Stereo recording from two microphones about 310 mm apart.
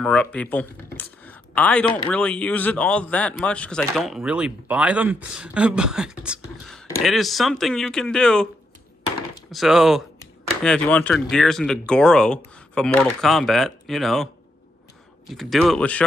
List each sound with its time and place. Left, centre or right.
0.0 s speech: centre
9.5 s speech: centre